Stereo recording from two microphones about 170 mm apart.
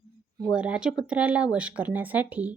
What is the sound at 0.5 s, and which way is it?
A woman's voice, 5° right (ahead or behind).